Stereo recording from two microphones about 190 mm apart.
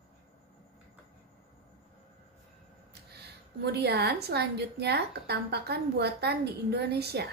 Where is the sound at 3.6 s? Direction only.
60° right (ahead or behind).